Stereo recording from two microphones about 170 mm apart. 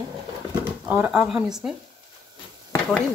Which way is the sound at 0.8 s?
10° right (ahead or behind).